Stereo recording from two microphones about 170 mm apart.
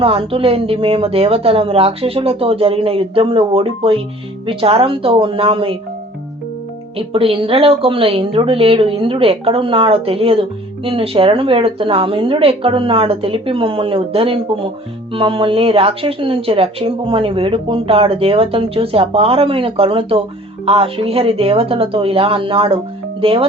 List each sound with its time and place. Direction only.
0.0 s speech: 35° right (ahead or behind)
7.1 s speech: 35° right (ahead or behind)